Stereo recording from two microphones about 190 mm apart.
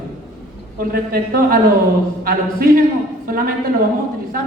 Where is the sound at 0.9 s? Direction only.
50° right (ahead or behind).